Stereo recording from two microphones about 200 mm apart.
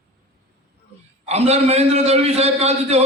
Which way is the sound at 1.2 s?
30° right (ahead or behind).